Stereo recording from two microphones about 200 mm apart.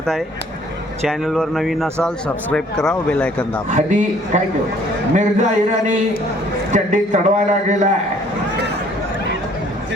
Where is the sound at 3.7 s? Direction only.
40° right (ahead or behind).